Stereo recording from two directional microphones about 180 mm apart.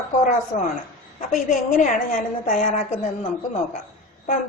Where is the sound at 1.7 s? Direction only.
45° left (ahead or behind).